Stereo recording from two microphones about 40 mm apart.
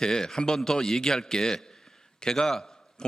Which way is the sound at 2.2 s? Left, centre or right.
Centre.